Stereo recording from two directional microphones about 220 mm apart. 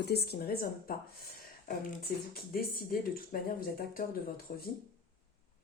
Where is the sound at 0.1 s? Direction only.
45° left (ahead or behind).